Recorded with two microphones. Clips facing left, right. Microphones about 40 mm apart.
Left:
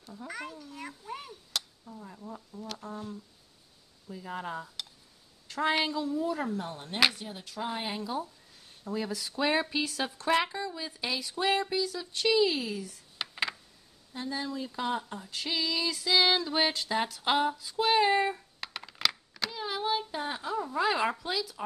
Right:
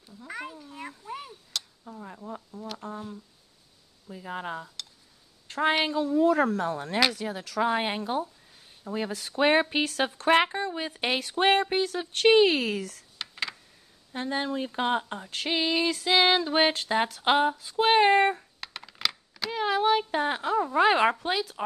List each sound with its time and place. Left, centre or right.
0.3 s a child's voice: centre
1.0 s a sound: centre
1.5 s a sound: centre
1.9 s speech: right
2.5 s a child's voice: centre
4.1 s speech: right
4.8 s a sound: centre
5.5 s speech: right
6.1 s a woman's voice: right
8.9 s speech: right
13.2 s computer keyboard: centre
14.1 s speech: right
18.6 s computer keyboard: centre
19.5 s speech: right